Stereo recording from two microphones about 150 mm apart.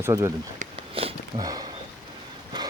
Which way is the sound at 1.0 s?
35° right (ahead or behind).